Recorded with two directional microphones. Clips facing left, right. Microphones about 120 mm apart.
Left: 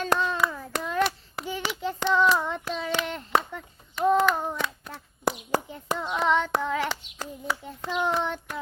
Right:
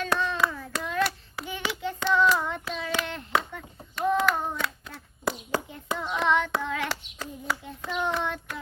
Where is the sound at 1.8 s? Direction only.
25° left (ahead or behind).